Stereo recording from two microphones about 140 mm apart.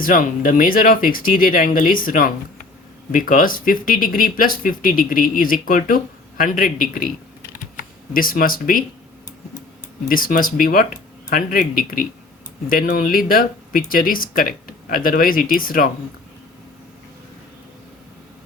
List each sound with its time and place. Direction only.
0.0 s speech: 75° left (ahead or behind)
3.1 s speech: 75° left (ahead or behind)
7.5 s typing: 90° left
10.1 s speech: 90° left